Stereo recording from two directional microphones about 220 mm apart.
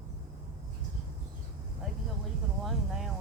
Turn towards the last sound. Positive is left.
turn(degrees=0)  # may be behind; listen again after turning